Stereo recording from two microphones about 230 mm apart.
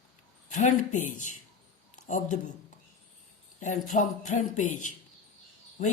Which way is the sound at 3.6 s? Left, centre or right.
Left.